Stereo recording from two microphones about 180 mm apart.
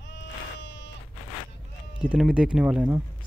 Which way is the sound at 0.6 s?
90° left.